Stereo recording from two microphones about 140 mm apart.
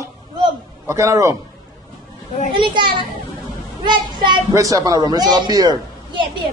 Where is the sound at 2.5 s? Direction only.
35° right (ahead or behind).